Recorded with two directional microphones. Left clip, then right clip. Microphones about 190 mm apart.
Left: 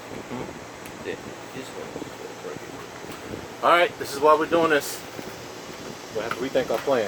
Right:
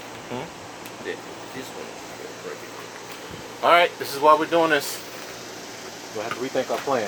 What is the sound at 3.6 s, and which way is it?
Speech, 35° right (ahead or behind).